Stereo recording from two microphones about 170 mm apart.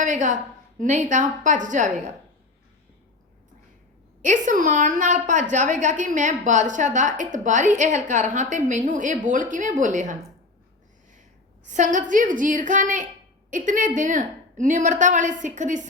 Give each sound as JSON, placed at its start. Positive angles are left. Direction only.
{"t": 0.0, "sound": "a woman's voice", "side_deg": -45}
{"t": 4.2, "sound": "a woman's voice", "side_deg": -50}
{"t": 11.6, "sound": "a woman's voice", "side_deg": -45}